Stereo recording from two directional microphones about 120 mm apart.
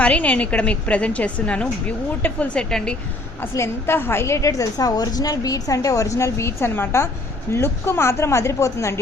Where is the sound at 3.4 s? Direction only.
20° left (ahead or behind).